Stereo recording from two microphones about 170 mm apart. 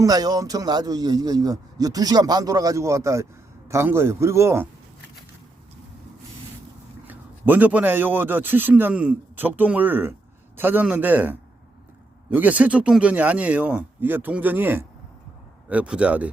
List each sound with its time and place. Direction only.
0.0 s a man's voice: 20° right (ahead or behind)
7.1 s a man's voice: 10° right (ahead or behind)